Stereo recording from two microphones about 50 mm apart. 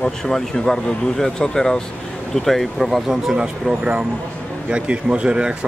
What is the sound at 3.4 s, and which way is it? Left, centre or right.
Speech, right.